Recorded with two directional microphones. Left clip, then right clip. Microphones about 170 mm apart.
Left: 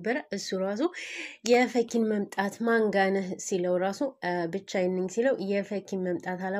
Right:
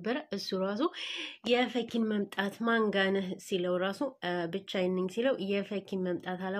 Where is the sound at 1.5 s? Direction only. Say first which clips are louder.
Left 6 dB; 30° left (ahead or behind).